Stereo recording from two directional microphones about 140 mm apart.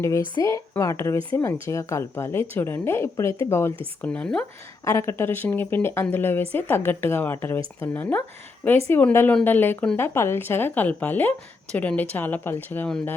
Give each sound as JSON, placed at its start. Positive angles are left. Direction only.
{"t": 0.4, "sound": "a woman's voice", "side_deg": 25}
{"t": 4.9, "sound": "a woman's voice", "side_deg": 20}